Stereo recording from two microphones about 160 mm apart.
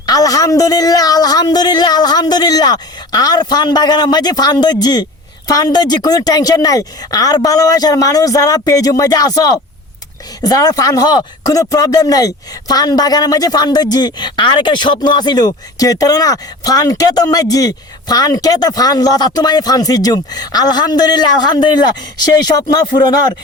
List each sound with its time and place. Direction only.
0.0 s speech: 25° left (ahead or behind)